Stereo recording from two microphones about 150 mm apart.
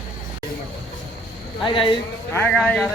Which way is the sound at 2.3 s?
10° left (ahead or behind).